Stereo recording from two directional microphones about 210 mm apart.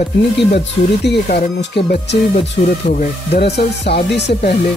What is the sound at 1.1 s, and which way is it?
Music, 50° left (ahead or behind).